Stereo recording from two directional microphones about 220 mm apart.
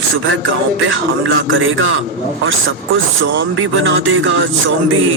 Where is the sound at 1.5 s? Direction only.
60° right (ahead or behind).